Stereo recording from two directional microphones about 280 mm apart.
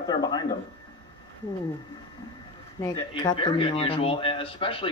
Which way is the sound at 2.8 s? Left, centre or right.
Centre.